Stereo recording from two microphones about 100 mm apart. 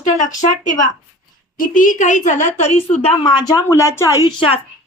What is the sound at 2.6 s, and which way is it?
Speech, 90° left.